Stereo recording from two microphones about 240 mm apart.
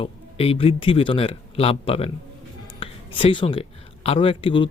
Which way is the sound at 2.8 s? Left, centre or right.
Left.